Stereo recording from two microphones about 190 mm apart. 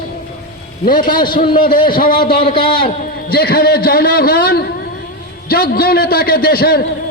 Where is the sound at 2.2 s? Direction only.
25° left (ahead or behind).